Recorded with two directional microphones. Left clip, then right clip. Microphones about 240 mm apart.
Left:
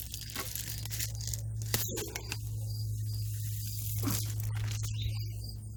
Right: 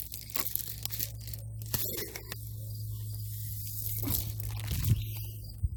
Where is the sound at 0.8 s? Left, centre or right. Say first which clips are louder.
Right 2 dB; right.